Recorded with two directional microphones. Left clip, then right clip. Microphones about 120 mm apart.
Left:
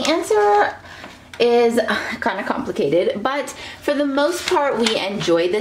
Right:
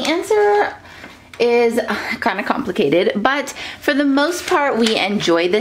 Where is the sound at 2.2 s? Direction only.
35° right (ahead or behind).